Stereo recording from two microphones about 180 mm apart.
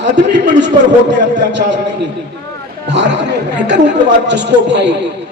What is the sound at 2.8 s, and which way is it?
A man's voice, 75° right (ahead or behind).